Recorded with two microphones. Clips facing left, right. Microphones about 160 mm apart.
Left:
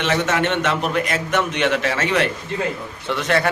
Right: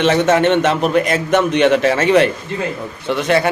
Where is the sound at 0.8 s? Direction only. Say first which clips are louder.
Right 6 dB; 25° right (ahead or behind).